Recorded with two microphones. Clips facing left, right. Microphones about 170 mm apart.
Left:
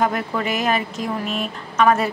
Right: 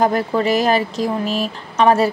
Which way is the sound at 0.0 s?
35° right (ahead or behind).